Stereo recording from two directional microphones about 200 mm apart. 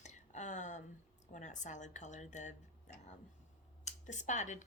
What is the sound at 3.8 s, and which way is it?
Speech, 35° left (ahead or behind).